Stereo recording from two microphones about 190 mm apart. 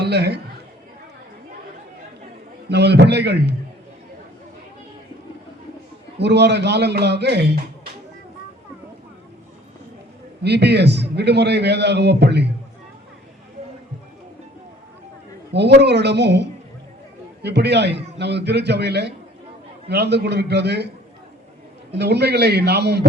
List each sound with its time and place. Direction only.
0.0 s speech: 60° right (ahead or behind)
2.6 s a man's voice: 60° right (ahead or behind)
6.1 s a man's voice: 60° right (ahead or behind)
10.4 s a man's voice: 60° right (ahead or behind)
15.5 s a man's voice: 60° right (ahead or behind)
21.9 s a man's voice: 60° right (ahead or behind)